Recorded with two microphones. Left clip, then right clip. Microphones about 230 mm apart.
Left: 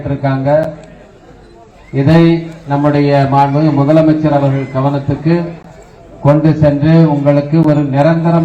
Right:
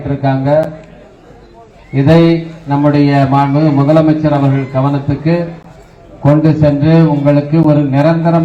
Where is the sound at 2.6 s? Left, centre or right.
Right.